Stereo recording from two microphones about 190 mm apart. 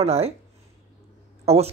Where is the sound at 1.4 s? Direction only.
35° right (ahead or behind).